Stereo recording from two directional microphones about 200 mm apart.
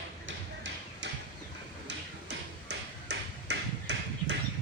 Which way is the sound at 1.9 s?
60° right (ahead or behind).